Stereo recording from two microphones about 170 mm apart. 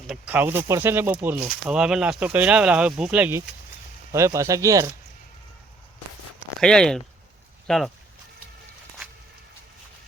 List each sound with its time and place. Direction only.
0.1 s speech: 10° right (ahead or behind)
6.6 s speech: 5° left (ahead or behind)